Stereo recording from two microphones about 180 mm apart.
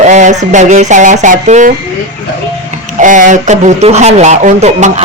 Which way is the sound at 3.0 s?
45° right (ahead or behind).